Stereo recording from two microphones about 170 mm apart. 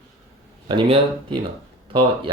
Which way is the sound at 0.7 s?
30° right (ahead or behind).